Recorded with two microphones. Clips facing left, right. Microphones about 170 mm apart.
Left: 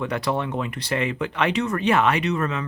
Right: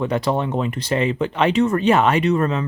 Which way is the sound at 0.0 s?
25° right (ahead or behind).